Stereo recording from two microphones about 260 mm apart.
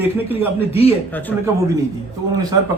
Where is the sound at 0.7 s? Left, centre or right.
Left.